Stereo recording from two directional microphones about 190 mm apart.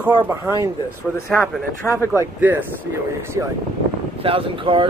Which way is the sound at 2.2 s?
10° right (ahead or behind).